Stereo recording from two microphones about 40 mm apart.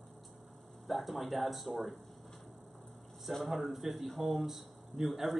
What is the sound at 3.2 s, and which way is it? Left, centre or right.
Speech, centre.